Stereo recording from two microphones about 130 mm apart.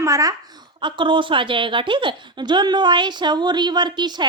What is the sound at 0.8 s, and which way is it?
A woman's voice, 40° right (ahead or behind).